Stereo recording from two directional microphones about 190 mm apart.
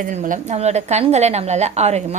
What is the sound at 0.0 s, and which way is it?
A woman's voice, 40° right (ahead or behind).